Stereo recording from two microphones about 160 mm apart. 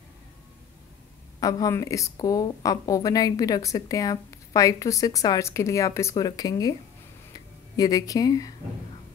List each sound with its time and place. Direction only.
1.4 s speech: 20° left (ahead or behind)